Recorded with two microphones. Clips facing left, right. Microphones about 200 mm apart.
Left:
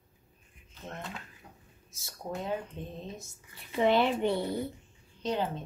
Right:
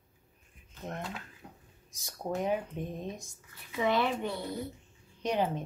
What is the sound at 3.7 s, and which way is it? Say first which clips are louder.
Speech: left 3 dB; 30° left (ahead or behind).